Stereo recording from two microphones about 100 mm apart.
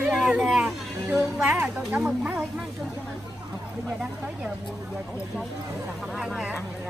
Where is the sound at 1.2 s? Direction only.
30° right (ahead or behind).